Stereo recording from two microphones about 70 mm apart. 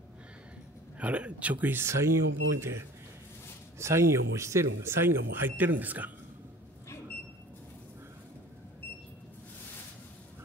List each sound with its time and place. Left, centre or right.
0.9 s speech: centre; by 2.8 s right
3.8 s speech: right